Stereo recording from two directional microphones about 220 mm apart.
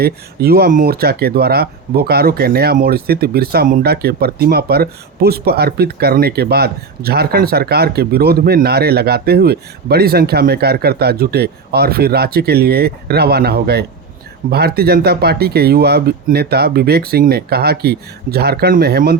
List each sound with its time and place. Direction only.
0.0 s speech: 45° right (ahead or behind)